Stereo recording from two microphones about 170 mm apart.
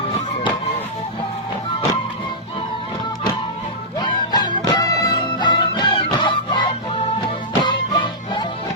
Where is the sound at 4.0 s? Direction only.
25° left (ahead or behind).